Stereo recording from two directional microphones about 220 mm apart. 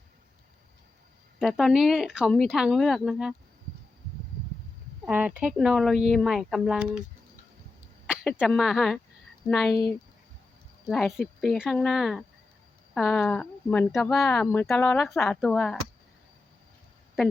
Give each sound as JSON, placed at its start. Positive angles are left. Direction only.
{"t": 1.4, "sound": "speech", "side_deg": 0}
{"t": 5.0, "sound": "speech", "side_deg": -5}
{"t": 8.0, "sound": "a sound", "side_deg": -5}
{"t": 8.4, "sound": "speech", "side_deg": 0}
{"t": 10.8, "sound": "speech", "side_deg": 0}